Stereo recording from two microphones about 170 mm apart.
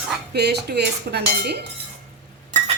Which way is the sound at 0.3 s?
75° right (ahead or behind).